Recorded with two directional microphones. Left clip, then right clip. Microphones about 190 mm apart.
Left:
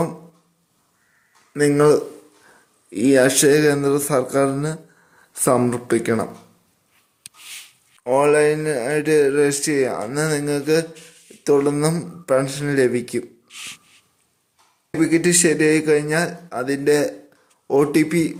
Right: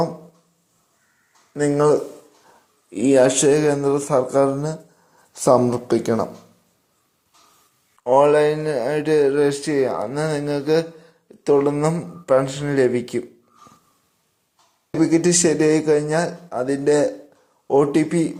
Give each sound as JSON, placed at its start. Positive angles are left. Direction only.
{"t": 1.5, "sound": "a man's voice", "side_deg": 20}
{"t": 5.5, "sound": "a man's voice", "side_deg": 5}
{"t": 8.0, "sound": "a man's voice", "side_deg": 10}
{"t": 14.9, "sound": "a man's voice", "side_deg": 0}